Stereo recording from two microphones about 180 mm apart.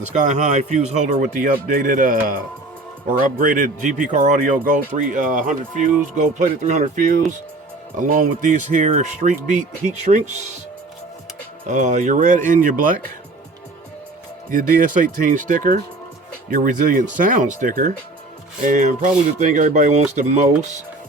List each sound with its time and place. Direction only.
0.0 s speech: 40° right (ahead or behind)
11.7 s speech: 45° right (ahead or behind)
14.5 s speech: 45° right (ahead or behind)